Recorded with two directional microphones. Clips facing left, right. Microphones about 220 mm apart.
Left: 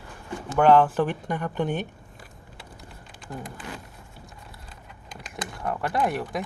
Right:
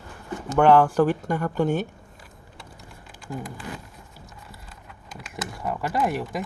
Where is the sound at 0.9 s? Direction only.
20° left (ahead or behind).